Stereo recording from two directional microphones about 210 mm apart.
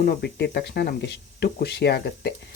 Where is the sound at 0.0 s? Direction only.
50° left (ahead or behind).